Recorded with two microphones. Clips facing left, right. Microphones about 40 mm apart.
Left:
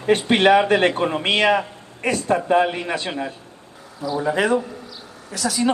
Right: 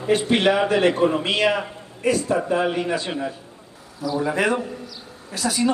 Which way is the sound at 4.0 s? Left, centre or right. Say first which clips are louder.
Left 1 dB; left.